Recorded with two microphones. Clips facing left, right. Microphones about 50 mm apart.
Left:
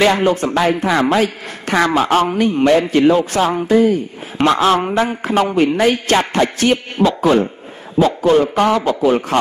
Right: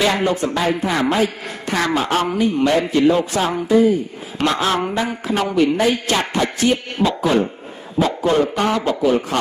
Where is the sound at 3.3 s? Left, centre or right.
Left.